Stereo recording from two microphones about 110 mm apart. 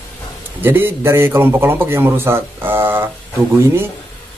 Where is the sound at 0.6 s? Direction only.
20° right (ahead or behind).